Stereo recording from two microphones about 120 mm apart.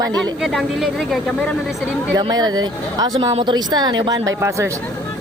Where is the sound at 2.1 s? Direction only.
35° right (ahead or behind).